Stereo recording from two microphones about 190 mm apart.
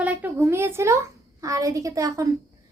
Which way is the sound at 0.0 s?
10° right (ahead or behind).